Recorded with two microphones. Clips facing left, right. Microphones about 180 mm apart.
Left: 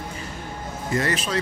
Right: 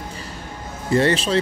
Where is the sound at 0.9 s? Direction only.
30° right (ahead or behind).